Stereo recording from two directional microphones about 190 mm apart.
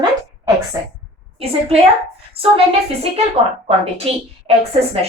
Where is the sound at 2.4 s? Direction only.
30° right (ahead or behind).